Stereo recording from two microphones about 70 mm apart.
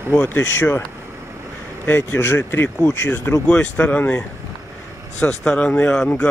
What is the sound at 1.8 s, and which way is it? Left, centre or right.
Speech, left.